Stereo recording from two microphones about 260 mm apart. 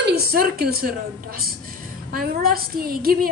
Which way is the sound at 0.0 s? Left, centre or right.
Right.